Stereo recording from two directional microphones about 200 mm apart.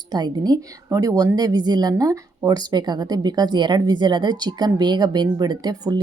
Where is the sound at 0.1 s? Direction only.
20° right (ahead or behind).